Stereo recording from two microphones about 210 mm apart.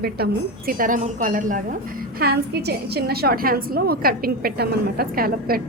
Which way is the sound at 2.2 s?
50° right (ahead or behind).